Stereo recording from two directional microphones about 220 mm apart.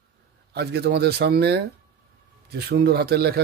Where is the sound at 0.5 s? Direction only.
50° right (ahead or behind).